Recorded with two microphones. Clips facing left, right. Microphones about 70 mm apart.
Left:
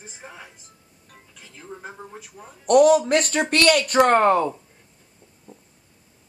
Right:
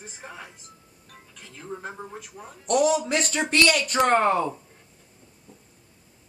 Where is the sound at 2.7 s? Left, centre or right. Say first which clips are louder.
Left 7 dB; left.